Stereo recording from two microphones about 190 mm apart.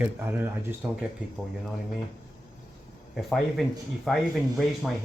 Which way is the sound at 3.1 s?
Centre (ahead or behind).